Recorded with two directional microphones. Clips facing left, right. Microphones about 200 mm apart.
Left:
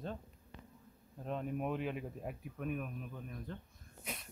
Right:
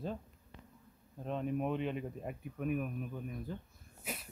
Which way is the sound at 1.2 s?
Centre (ahead or behind).